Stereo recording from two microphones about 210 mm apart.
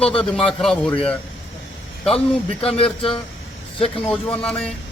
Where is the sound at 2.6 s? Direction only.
25° left (ahead or behind).